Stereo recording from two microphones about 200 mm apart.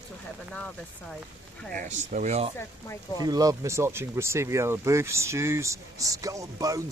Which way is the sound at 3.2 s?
20° right (ahead or behind).